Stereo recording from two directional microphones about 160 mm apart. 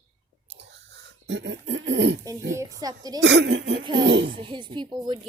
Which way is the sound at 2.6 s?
20° right (ahead or behind).